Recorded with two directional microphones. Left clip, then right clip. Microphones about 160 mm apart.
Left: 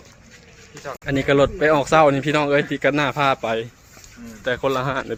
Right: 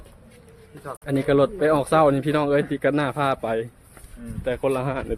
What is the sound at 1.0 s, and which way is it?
Speech, centre (ahead or behind).